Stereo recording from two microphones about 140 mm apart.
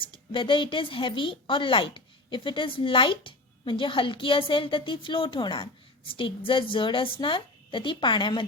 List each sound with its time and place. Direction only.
0.0 s a woman's voice: 40° left (ahead or behind)